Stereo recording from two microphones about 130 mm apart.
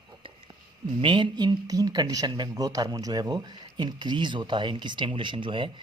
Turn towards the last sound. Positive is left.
turn(degrees=-40)  # may be behind; listen again after turning